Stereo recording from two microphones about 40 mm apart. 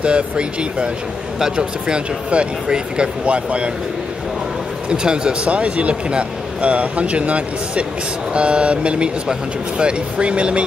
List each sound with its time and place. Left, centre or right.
0.0 s speech: right
4.8 s speech: right